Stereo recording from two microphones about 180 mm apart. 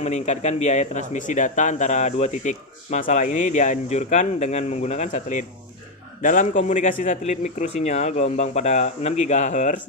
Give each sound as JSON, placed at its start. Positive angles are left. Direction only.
{"t": 0.0, "sound": "speech", "side_deg": 40}